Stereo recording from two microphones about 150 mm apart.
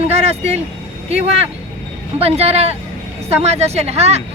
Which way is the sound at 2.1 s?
45° right (ahead or behind).